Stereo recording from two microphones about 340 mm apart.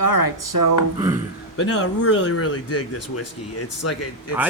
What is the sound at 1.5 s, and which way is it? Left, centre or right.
Speech, left.